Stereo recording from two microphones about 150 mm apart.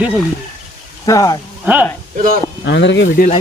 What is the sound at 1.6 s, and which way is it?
Speech, 10° right (ahead or behind).